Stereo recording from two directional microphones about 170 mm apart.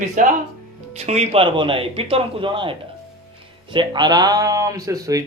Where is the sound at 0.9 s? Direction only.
40° right (ahead or behind).